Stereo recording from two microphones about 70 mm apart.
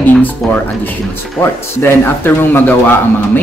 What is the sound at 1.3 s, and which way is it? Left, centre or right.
Speech, left.